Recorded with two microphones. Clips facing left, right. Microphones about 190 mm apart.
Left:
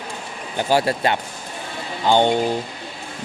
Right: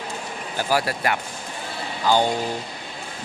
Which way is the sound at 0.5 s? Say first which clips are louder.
Left 4 dB; 25° left (ahead or behind).